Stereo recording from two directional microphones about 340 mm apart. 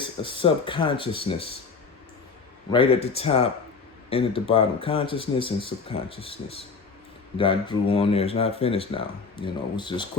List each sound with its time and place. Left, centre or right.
0.0 s speech: centre
2.7 s speech: centre